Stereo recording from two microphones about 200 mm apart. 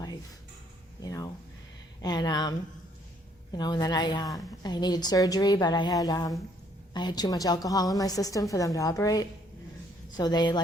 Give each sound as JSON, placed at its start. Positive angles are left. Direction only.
{"t": 1.0, "sound": "a woman's voice", "side_deg": 15}